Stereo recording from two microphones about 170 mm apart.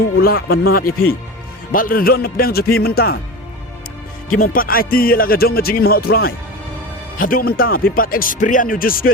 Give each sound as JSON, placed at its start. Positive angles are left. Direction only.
{"t": 0.2, "sound": "speech", "side_deg": 60}
{"t": 4.4, "sound": "speech", "side_deg": 55}